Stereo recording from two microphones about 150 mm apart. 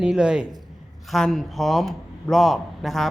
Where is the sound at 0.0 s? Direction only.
5° right (ahead or behind).